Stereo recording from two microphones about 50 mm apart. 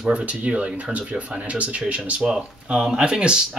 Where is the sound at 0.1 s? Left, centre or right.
Right.